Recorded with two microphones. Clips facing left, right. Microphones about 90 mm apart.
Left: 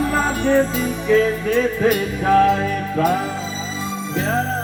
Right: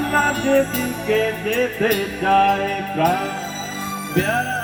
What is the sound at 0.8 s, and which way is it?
Music, 50° right (ahead or behind).